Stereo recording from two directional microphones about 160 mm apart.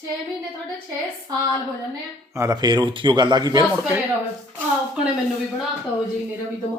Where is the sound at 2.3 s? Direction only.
20° right (ahead or behind).